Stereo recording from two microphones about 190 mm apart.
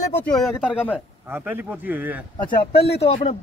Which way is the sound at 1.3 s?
10° right (ahead or behind).